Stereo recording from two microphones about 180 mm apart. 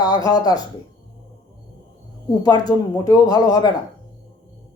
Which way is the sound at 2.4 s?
20° left (ahead or behind).